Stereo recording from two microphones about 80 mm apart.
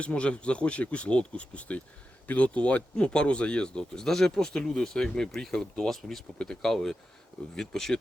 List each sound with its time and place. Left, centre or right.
0.0 s speech: centre